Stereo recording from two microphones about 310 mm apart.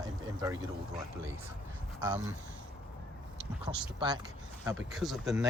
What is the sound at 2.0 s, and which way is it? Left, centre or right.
Speech, centre.